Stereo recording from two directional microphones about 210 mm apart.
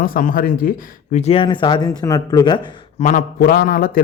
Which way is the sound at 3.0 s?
40° left (ahead or behind).